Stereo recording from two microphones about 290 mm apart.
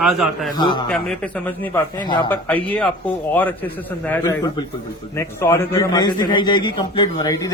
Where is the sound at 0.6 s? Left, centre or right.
Centre.